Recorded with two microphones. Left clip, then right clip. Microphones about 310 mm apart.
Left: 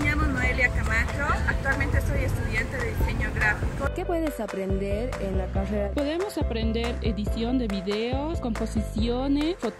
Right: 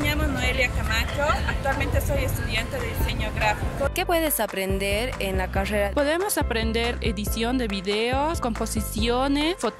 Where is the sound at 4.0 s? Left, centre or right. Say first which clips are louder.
Right 6 dB; right.